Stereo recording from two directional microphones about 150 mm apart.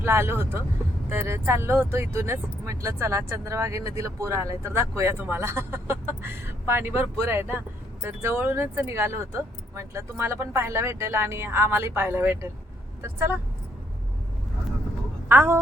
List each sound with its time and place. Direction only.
0.0 s speech: 15° right (ahead or behind)
15.3 s speech: 15° right (ahead or behind)